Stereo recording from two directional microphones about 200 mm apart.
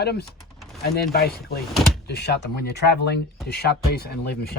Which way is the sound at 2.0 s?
55° left (ahead or behind).